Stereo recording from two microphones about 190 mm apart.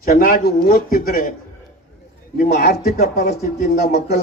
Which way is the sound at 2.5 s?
50° left (ahead or behind).